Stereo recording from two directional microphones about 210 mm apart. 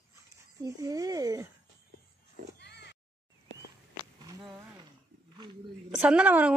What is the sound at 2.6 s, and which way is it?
Oink, 55° left (ahead or behind).